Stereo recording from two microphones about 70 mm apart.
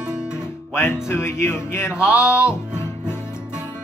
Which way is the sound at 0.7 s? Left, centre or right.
Left.